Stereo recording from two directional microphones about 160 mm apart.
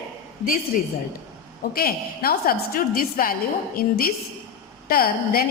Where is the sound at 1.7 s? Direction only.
65° left (ahead or behind).